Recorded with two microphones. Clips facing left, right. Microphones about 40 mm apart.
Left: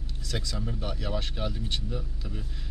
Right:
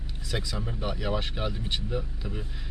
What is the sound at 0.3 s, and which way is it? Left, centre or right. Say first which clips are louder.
A man's voice: right 1 dB; centre.